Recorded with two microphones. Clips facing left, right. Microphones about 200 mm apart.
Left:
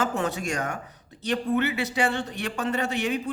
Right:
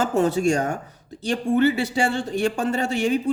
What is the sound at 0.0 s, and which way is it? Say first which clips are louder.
A man's voice: right 7 dB; 30° right (ahead or behind).